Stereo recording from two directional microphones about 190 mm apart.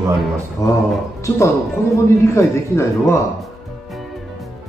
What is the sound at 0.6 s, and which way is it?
Speech, 20° left (ahead or behind).